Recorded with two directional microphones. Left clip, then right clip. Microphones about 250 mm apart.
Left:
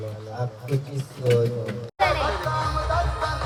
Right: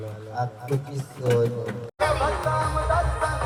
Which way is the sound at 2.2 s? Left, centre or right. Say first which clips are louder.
Right 1 dB; right.